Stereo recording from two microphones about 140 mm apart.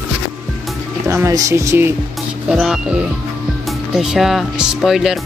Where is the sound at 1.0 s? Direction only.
20° right (ahead or behind).